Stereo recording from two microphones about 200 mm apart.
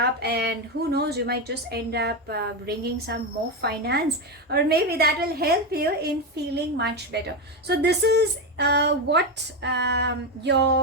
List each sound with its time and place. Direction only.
0.0 s a woman's voice: 55° right (ahead or behind)